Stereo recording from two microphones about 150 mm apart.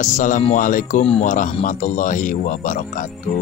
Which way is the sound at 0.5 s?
60° left (ahead or behind).